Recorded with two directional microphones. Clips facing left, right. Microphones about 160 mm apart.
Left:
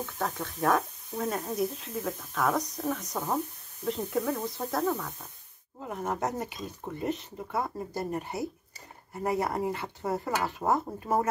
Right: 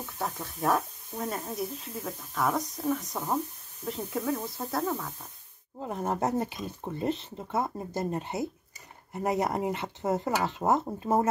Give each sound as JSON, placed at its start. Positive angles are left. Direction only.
{"t": 0.0, "sound": "speech", "side_deg": -5}
{"t": 5.9, "sound": "speech", "side_deg": -30}